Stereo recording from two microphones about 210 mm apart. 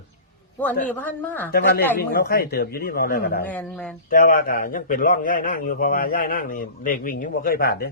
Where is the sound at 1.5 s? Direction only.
50° left (ahead or behind).